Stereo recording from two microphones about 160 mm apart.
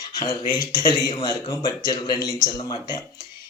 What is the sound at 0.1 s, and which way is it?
Speech, 25° left (ahead or behind).